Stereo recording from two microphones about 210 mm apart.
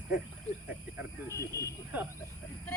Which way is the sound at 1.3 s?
15° left (ahead or behind).